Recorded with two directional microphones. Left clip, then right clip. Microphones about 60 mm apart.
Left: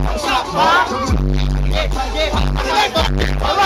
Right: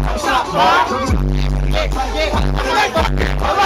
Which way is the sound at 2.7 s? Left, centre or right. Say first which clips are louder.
Even; left.